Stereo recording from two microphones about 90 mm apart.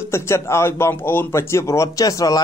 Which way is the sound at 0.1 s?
30° left (ahead or behind).